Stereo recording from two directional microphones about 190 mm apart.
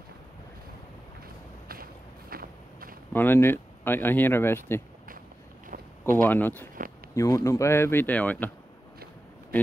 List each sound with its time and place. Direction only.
1.7 s walk: 50° right (ahead or behind)
3.1 s speech: 10° left (ahead or behind)
5.7 s vehicle: 45° right (ahead or behind)
6.2 s speech: 10° left (ahead or behind)